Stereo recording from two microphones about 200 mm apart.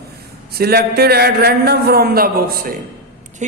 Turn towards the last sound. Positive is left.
turn(degrees=-35)  # may be behind; listen again after turning